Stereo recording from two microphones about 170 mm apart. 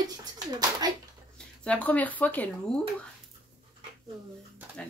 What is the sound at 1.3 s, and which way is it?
Speech, 5° left (ahead or behind).